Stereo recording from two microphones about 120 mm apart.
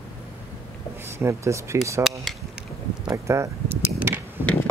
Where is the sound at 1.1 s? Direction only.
20° right (ahead or behind).